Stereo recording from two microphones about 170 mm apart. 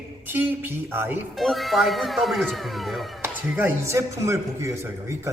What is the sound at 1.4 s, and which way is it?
Speech, centre (ahead or behind).